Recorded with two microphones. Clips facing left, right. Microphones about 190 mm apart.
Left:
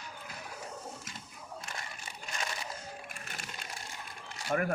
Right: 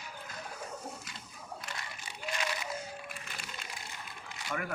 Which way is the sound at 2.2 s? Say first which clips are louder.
Right 4 dB; 40° left (ahead or behind).